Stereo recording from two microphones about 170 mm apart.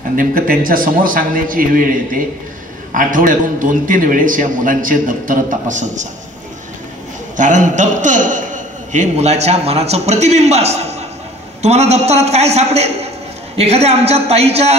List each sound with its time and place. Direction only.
0.1 s a man's voice: 55° right (ahead or behind)
7.3 s a man's voice: 50° right (ahead or behind)